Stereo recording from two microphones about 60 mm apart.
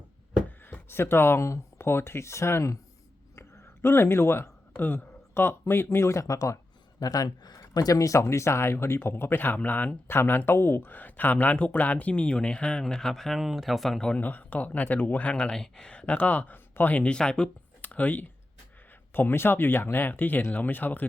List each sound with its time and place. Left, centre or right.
0.6 s a man's voice: left
7.0 s speech: left
10.1 s speech: left; by 14.1 s centre
14.2 s speech: left
15.3 s speech: centre
17.8 s speech: left
19.1 s speech: left